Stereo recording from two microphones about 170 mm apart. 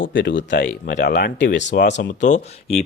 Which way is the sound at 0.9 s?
75° left (ahead or behind).